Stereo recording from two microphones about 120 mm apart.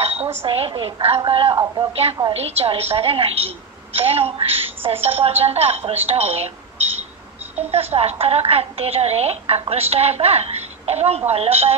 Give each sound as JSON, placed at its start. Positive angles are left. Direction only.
{"t": 0.0, "sound": "a woman's voice", "side_deg": -60}
{"t": 2.3, "sound": "a woman's voice", "side_deg": -60}
{"t": 7.5, "sound": "a woman's voice", "side_deg": -55}